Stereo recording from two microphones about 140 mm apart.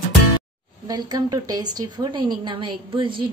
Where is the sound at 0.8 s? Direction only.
30° right (ahead or behind).